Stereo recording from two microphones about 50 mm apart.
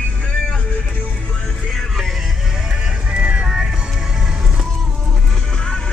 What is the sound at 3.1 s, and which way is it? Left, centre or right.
Music, centre.